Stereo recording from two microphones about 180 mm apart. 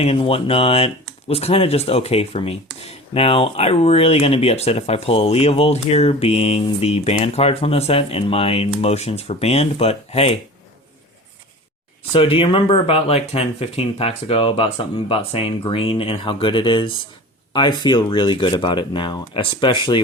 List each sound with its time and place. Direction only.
0.0 s speech: 30° left (ahead or behind)
12.1 s speech: 30° left (ahead or behind)